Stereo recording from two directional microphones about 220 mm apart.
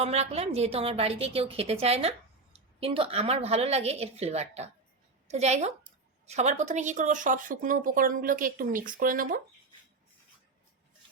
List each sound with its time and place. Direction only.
0.0 s a woman's voice: 30° right (ahead or behind)